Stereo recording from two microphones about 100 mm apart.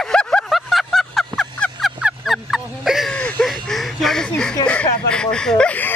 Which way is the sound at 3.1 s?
10° left (ahead or behind).